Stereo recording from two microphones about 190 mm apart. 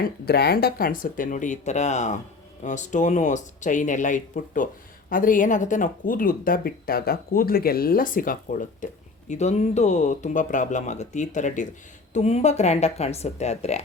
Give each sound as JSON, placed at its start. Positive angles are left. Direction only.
{"t": 0.0, "sound": "speech", "side_deg": 55}